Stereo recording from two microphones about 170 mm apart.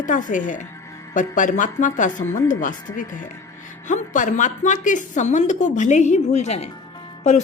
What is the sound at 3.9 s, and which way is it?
A woman's voice, 45° left (ahead or behind).